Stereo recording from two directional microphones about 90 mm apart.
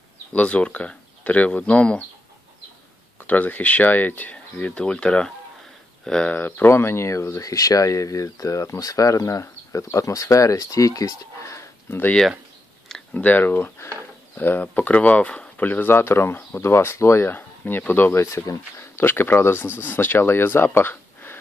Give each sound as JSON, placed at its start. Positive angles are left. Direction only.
{"t": 0.3, "sound": "speech", "side_deg": 15}
{"t": 3.2, "sound": "speech", "side_deg": 20}
{"t": 13.1, "sound": "speech", "side_deg": 20}